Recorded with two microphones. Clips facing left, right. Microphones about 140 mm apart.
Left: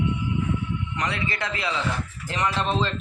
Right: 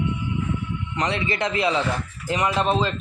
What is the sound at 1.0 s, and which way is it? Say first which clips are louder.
A man's voice: right 6 dB; 25° right (ahead or behind).